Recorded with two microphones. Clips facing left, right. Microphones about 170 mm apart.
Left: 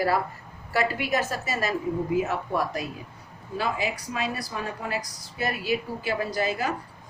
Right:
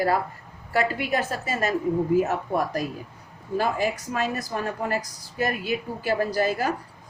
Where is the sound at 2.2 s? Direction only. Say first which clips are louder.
Right 3 dB; 45° right (ahead or behind).